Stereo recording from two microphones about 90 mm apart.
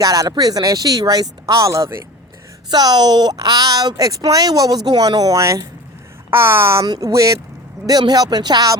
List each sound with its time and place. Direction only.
0.0 s speech: 45° right (ahead or behind)
2.6 s a woman's voice: 50° right (ahead or behind); by 6.8 s 30° right (ahead or behind)
6.8 s speech: 50° right (ahead or behind)
7.1 s speech: 35° right (ahead or behind)
7.9 s speech: 50° right (ahead or behind)